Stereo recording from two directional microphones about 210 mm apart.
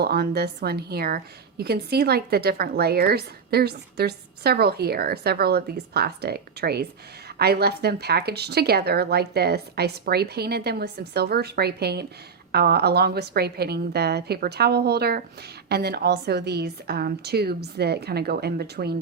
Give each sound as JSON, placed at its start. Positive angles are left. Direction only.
{"t": 0.0, "sound": "a woman's voice", "side_deg": -50}